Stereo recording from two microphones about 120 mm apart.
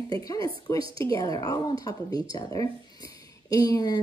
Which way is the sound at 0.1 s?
30° left (ahead or behind).